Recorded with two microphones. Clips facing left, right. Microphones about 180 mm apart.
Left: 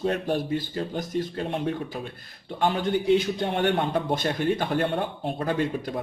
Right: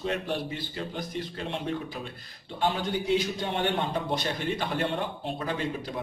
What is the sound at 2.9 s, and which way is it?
A man's voice, 55° left (ahead or behind).